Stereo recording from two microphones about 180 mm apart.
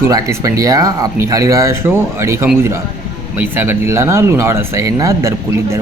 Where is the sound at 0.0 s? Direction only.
15° right (ahead or behind).